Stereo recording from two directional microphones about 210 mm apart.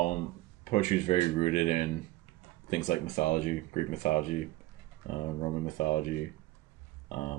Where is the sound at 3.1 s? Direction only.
35° left (ahead or behind).